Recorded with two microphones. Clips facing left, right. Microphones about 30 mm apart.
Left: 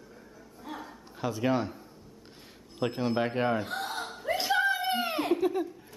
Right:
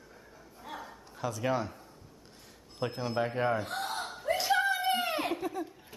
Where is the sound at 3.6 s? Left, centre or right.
Centre.